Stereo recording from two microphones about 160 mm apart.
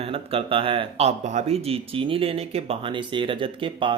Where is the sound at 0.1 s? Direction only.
35° right (ahead or behind).